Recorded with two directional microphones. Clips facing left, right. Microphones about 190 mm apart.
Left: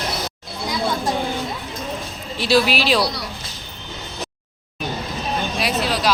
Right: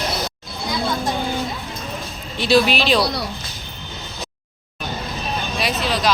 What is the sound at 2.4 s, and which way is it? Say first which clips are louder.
Speech: right 1 dB; centre (ahead or behind).